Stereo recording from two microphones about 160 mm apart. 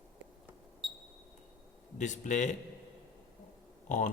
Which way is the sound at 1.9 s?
50° left (ahead or behind).